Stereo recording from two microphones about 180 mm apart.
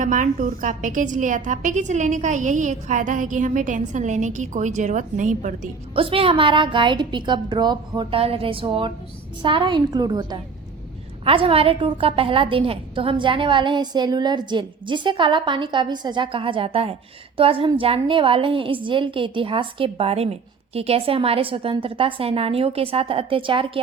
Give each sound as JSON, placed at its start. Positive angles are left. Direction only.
{"t": 0.0, "sound": "a woman's voice", "side_deg": -45}
{"t": 5.9, "sound": "a woman's voice", "side_deg": -30}